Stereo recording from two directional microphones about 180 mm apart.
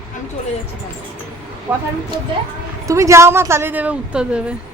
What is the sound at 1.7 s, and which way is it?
Speech, 20° right (ahead or behind).